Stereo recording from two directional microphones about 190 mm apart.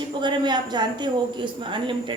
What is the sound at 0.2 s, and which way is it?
A woman's voice, 25° right (ahead or behind).